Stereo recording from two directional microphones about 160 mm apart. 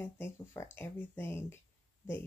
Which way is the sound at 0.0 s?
15° left (ahead or behind).